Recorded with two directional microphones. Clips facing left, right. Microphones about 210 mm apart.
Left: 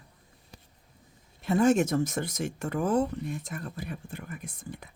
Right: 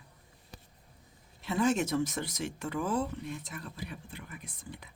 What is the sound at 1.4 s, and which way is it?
Speech, 50° left (ahead or behind).